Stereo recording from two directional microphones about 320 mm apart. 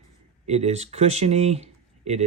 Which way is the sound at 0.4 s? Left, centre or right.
Centre.